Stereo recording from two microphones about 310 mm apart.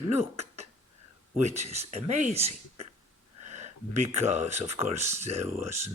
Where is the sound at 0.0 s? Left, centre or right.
Right.